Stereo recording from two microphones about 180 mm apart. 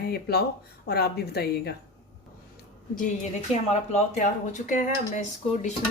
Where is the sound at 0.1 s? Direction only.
60° left (ahead or behind).